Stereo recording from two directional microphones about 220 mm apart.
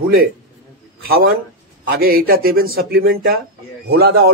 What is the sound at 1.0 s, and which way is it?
Speech, 45° right (ahead or behind).